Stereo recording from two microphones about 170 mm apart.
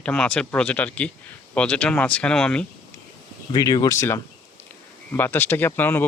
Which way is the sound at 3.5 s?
20° left (ahead or behind).